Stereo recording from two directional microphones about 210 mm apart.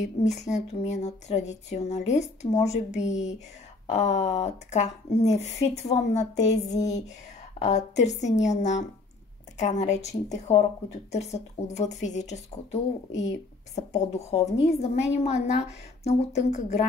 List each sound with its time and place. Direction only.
0.0 s a woman's voice: 35° left (ahead or behind)